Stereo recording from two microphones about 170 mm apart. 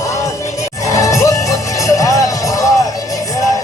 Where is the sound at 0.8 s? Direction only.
20° left (ahead or behind).